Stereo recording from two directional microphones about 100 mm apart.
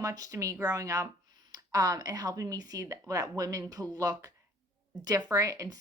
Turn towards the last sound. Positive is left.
turn(degrees=-35)  # may be behind; listen again after turning